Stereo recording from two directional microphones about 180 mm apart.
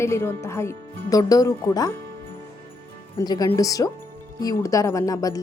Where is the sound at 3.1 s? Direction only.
20° left (ahead or behind).